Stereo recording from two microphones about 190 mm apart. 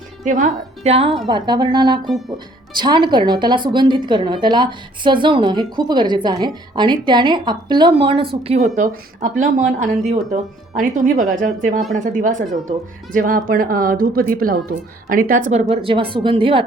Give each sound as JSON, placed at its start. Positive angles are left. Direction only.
{"t": 0.3, "sound": "a woman's voice", "side_deg": -40}
{"t": 8.4, "sound": "a woman's voice", "side_deg": -40}
{"t": 15.7, "sound": "a woman's voice", "side_deg": -30}